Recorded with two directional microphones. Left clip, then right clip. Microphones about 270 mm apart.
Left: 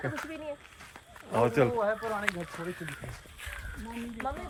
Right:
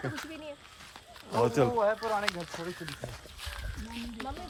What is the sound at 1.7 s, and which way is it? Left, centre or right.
Speech, right.